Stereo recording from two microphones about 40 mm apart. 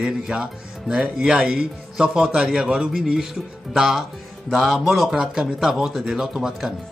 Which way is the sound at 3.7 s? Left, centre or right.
Centre.